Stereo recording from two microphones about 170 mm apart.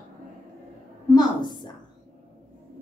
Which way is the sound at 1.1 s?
25° left (ahead or behind).